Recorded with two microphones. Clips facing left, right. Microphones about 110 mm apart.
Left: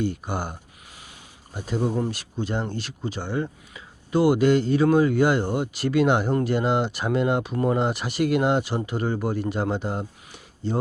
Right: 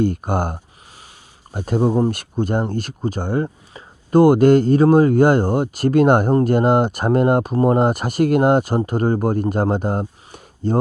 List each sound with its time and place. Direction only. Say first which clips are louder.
0.0 s speech: right 8 dB; 50° right (ahead or behind)